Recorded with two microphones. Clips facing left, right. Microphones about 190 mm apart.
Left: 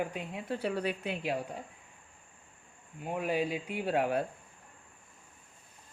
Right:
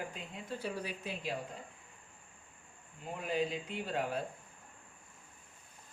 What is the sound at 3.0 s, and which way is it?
A woman's voice, 65° left (ahead or behind).